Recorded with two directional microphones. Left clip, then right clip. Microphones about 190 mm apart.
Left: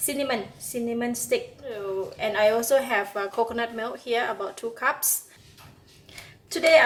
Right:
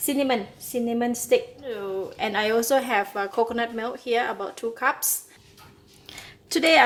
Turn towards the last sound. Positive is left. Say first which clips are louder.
# left 1 dB
turn(degrees=-55)  # may be behind; listen again after turning